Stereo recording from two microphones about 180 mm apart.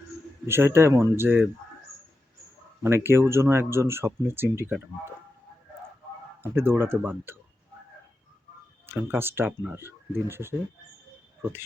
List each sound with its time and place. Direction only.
0.4 s speech: 15° right (ahead or behind)
2.8 s speech: 15° right (ahead or behind)
6.4 s speech: 10° right (ahead or behind)
8.9 s speech: 10° right (ahead or behind)